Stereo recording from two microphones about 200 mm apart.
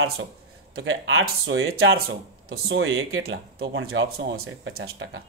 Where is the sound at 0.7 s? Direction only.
85° right.